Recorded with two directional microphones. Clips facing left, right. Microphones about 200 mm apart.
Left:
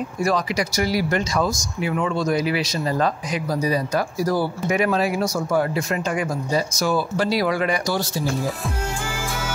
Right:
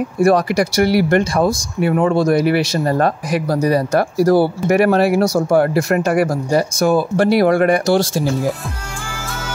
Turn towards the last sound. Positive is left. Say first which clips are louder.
# right 9 dB
turn(degrees=-55)  # may be behind; listen again after turning